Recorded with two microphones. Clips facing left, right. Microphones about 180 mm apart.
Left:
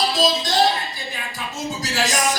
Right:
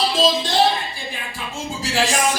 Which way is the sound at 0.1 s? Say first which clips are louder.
Right 2 dB; 40° left (ahead or behind).